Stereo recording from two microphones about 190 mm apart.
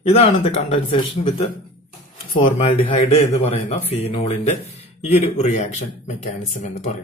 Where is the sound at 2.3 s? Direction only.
45° left (ahead or behind).